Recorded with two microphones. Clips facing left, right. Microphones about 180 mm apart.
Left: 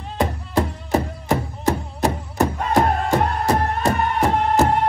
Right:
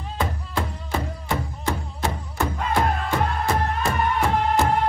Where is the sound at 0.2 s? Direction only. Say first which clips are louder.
Left 6 dB; 40° left (ahead or behind).